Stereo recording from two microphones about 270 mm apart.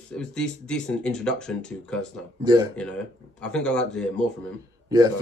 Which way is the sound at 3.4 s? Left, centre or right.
Centre.